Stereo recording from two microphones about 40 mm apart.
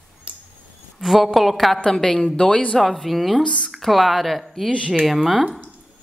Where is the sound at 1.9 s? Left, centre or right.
Centre.